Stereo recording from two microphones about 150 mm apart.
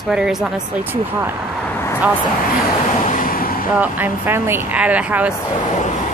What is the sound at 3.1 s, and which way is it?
Vehicle, 65° left (ahead or behind).